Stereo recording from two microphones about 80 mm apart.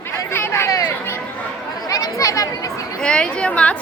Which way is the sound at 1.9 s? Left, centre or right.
Left.